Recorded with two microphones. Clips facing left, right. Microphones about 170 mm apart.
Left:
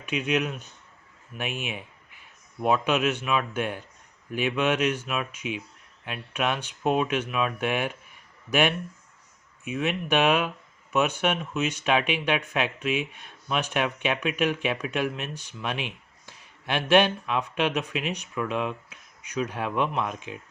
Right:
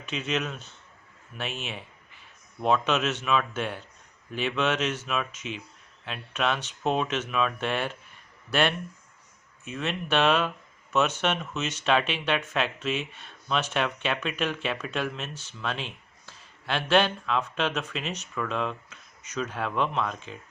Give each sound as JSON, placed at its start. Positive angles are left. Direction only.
{"t": 0.0, "sound": "speech", "side_deg": 15}